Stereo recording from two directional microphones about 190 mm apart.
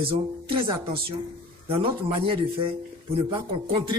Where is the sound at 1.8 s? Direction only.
30° right (ahead or behind).